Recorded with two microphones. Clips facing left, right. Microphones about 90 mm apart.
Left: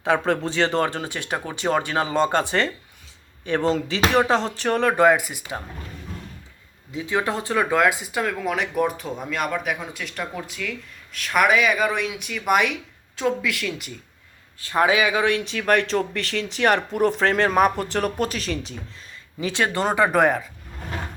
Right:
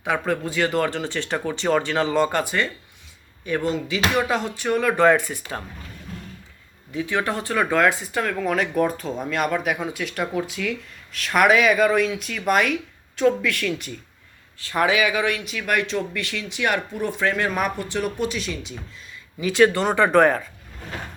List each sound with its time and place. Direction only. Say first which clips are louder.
0.0 s speech: left 3 dB; 30° left (ahead or behind)
4.9 s speech: even; 15° left (ahead or behind)
6.9 s speech: even; 25° left (ahead or behind); by 12.6 s 5° left (ahead or behind)
13.1 s speech: right 4 dB; 15° left (ahead or behind)
14.6 s speech: left 1 dB; 25° left (ahead or behind); by 18.7 s 40° left (ahead or behind)
19.4 s speech: right 5 dB; 25° left (ahead or behind)
19.9 s speech: right 2 dB; 10° left (ahead or behind)